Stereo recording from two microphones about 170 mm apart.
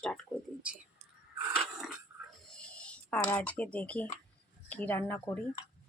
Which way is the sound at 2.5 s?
5° left (ahead or behind).